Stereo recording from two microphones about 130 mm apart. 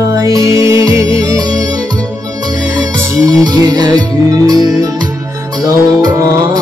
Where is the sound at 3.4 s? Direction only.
30° right (ahead or behind).